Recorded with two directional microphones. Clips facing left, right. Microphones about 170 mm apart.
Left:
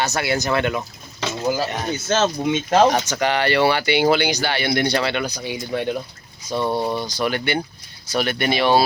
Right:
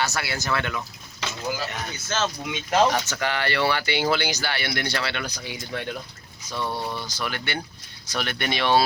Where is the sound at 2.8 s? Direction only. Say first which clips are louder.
Left 5 dB; 40° left (ahead or behind).